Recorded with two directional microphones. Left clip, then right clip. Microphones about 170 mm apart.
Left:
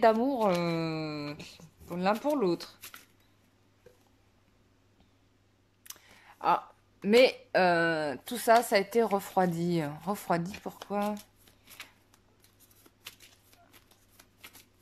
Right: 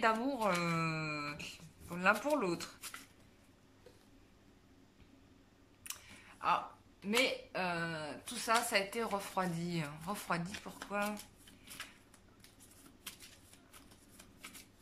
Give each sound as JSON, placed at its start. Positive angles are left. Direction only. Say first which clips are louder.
{"t": 0.0, "sound": "speech", "louder": "left 8 dB", "side_deg": 30}
{"t": 5.9, "sound": "speech", "louder": "even", "side_deg": 50}